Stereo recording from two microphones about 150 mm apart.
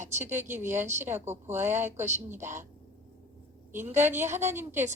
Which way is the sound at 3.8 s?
15° right (ahead or behind).